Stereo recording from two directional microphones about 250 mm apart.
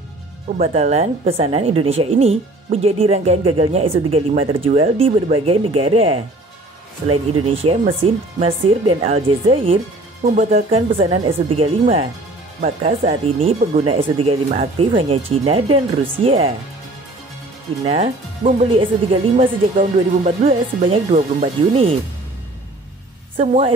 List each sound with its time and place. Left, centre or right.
0.6 s a woman's voice: right
7.4 s a woman's voice: right
17.8 s a woman's voice: right
23.3 s a woman's voice: right